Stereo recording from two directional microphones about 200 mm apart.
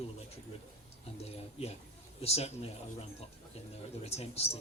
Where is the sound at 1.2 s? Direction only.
30° left (ahead or behind).